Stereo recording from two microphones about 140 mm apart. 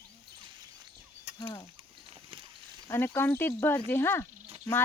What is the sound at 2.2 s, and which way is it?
Horse, 35° right (ahead or behind).